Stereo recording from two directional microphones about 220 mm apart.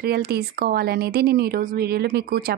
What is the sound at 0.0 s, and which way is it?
A woman's voice, 45° right (ahead or behind).